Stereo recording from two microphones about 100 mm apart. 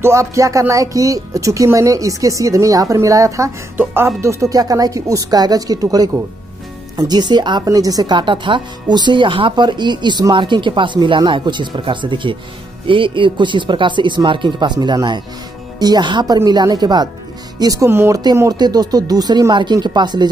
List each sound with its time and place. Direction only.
0.0 s speech: 30° right (ahead or behind); by 7.6 s 50° right (ahead or behind)
7.6 s speech: 35° right (ahead or behind)
17.8 s speech: 25° right (ahead or behind)
18.2 s speech: 40° right (ahead or behind)